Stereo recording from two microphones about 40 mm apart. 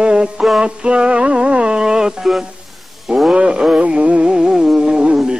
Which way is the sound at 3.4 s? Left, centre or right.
Right.